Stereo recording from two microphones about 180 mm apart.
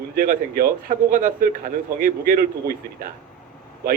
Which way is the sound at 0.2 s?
55° right (ahead or behind).